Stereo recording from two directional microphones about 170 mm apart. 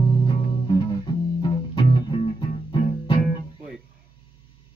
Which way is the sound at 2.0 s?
30° left (ahead or behind).